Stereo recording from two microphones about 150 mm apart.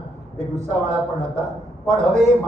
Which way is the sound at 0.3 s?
50° right (ahead or behind).